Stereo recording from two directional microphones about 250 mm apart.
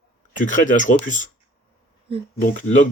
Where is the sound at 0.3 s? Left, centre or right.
Left.